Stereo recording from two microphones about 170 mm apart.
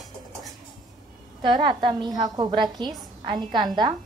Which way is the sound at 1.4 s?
30° right (ahead or behind).